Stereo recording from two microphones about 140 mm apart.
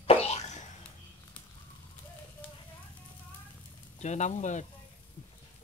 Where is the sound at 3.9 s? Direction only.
55° left (ahead or behind).